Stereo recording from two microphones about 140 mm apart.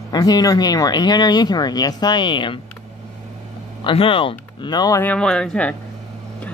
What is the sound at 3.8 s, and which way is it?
Speech, 40° left (ahead or behind).